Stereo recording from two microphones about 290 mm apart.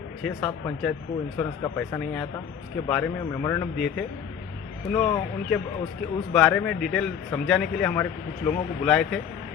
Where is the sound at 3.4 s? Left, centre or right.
Centre.